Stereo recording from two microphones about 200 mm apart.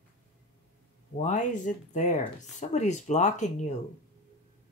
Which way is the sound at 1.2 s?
40° left (ahead or behind).